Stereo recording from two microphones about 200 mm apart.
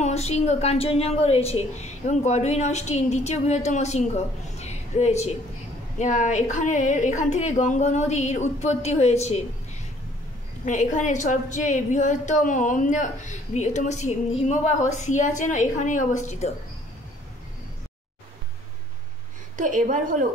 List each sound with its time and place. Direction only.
0.0 s a woman's voice: 35° left (ahead or behind)
10.6 s a woman's voice: 35° left (ahead or behind)
19.5 s a woman's voice: 40° right (ahead or behind)